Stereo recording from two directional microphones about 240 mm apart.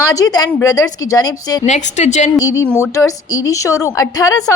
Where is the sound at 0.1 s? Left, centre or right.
Centre.